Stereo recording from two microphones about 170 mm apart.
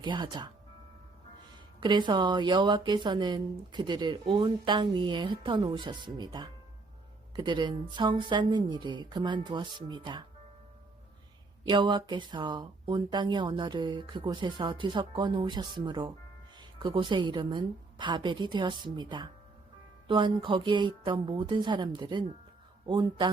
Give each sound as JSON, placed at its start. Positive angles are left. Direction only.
{"t": 0.0, "sound": "a woman's voice", "side_deg": -30}
{"t": 1.8, "sound": "a woman's voice", "side_deg": -25}
{"t": 11.7, "sound": "a woman's voice", "side_deg": -25}